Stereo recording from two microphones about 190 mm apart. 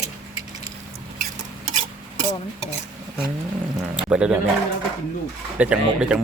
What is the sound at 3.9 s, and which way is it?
Speech, 5° right (ahead or behind).